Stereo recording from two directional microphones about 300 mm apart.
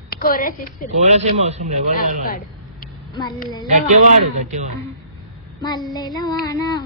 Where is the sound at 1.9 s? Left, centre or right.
Left.